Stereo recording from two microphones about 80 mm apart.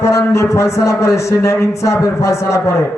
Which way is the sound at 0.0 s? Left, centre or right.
Left.